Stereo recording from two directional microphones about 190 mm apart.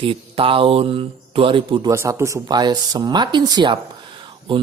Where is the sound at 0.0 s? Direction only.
30° right (ahead or behind).